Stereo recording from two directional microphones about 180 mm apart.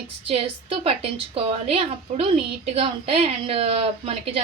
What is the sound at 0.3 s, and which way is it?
A woman's voice, 30° right (ahead or behind).